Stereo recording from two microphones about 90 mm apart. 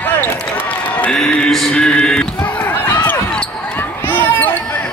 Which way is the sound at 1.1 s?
10° left (ahead or behind).